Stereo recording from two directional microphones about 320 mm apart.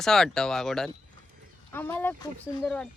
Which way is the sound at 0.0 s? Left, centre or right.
Centre.